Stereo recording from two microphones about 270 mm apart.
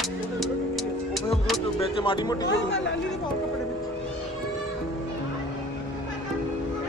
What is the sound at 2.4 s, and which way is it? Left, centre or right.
Speech, left.